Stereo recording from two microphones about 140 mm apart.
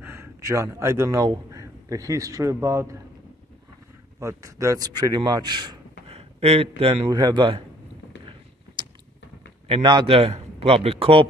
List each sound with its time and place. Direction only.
0.0 s speech: 15° right (ahead or behind)
4.2 s a man's voice: 20° right (ahead or behind)
6.1 s a man's voice: 45° right (ahead or behind)
9.7 s a man's voice: 35° right (ahead or behind)